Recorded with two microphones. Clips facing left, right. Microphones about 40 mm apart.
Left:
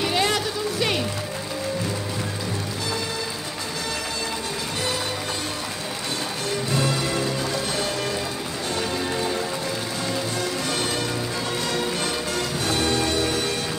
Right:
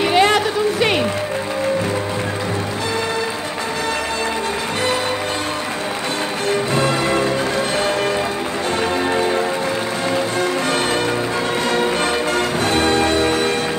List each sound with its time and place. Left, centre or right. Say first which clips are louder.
0.0 s music: right 8 dB; right
6.5 s music: right 6 dB; right
9.1 s music: right 8 dB; right
11.7 s change ringing: right 9 dB; right